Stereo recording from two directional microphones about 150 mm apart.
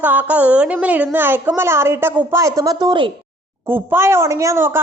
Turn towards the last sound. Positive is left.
turn(degrees=-15)  # may be behind; listen again after turning